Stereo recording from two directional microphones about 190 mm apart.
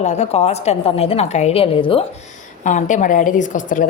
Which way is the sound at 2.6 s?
40° left (ahead or behind).